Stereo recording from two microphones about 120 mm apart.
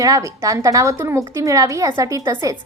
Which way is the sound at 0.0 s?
30° right (ahead or behind).